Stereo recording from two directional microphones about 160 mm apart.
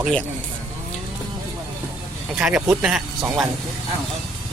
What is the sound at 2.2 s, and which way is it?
Speech, 5° right (ahead or behind).